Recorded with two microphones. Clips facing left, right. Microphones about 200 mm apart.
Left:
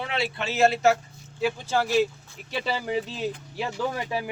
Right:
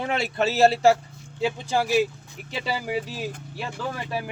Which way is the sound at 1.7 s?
10° right (ahead or behind).